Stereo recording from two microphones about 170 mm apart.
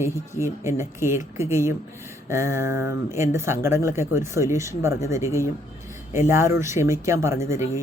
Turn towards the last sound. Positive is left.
turn(degrees=-15)  # may be behind; listen again after turning